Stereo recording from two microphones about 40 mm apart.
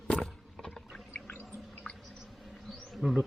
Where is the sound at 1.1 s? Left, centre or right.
Left.